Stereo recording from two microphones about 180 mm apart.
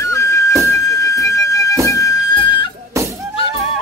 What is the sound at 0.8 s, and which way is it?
Flute, 15° left (ahead or behind).